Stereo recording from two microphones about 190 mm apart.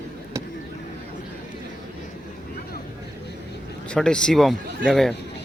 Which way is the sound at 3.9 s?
5° left (ahead or behind).